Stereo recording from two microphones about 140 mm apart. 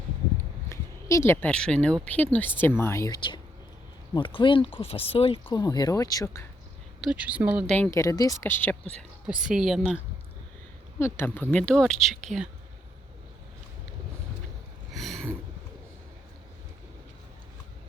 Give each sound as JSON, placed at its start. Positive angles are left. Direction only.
{"t": 0.7, "sound": "speech", "side_deg": 20}
{"t": 3.2, "sound": "speech", "side_deg": 35}
{"t": 7.0, "sound": "speech", "side_deg": -10}
{"t": 7.9, "sound": "speech", "side_deg": 25}
{"t": 9.4, "sound": "a woman's voice", "side_deg": -5}
{"t": 11.0, "sound": "speech", "side_deg": 15}
{"t": 14.9, "sound": "a sound", "side_deg": 0}